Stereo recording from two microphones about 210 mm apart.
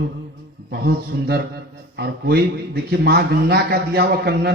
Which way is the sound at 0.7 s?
50° right (ahead or behind).